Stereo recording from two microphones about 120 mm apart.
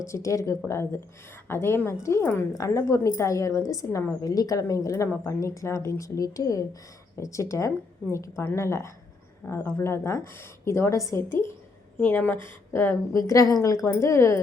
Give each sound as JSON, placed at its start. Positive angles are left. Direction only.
{"t": 0.0, "sound": "a woman's voice", "side_deg": 25}